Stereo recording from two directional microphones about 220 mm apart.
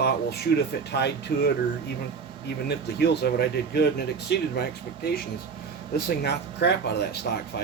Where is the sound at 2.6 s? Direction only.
45° left (ahead or behind).